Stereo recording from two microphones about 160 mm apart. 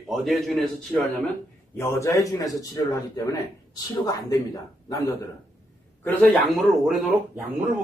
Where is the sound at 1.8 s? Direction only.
20° left (ahead or behind).